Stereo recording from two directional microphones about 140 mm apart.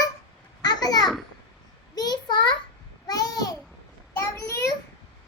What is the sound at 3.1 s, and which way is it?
Babbling, 25° left (ahead or behind).